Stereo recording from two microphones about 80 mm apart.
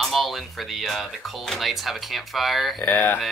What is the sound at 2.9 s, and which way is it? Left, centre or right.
Speech, left.